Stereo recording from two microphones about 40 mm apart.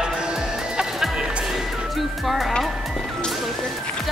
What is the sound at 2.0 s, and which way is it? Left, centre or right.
Music, centre.